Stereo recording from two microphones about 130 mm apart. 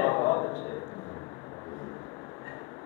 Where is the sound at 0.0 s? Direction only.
20° left (ahead or behind).